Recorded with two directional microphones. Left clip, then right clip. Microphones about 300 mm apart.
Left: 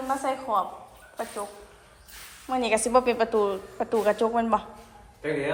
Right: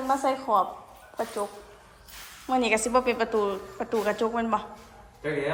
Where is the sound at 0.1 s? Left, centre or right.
Centre.